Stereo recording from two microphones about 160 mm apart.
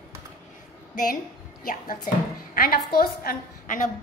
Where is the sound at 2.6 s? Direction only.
70° left (ahead or behind).